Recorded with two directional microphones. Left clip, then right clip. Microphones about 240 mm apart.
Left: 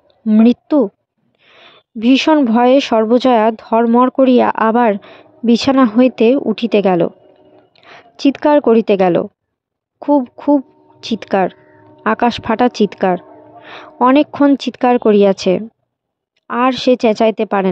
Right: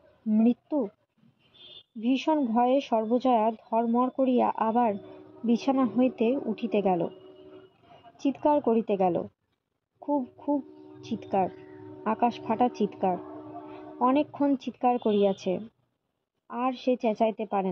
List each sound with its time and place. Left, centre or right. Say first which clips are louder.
0.3 s speech: left 14 dB; left
2.0 s speech: left 15 dB; left
8.2 s speech: left 13 dB; left